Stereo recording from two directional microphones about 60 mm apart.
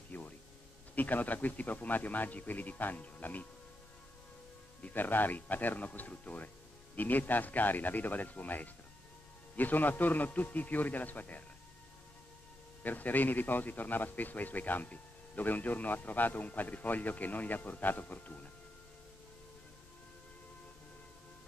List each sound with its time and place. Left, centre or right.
0.1 s a sound: left
0.9 s a man's voice: left
4.8 s a man's voice: left
12.8 s a man's voice: left